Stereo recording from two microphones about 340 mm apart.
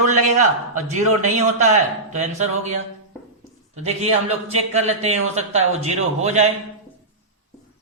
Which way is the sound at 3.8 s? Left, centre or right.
Centre.